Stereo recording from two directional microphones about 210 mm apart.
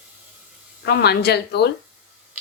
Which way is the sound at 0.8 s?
50° left (ahead or behind).